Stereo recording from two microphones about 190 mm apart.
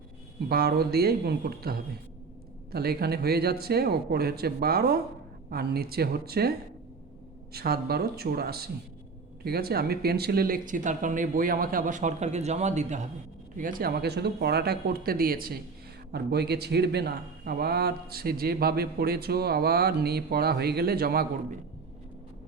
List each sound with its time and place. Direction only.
0.4 s a man's voice: 55° right (ahead or behind)
7.5 s a man's voice: 55° right (ahead or behind)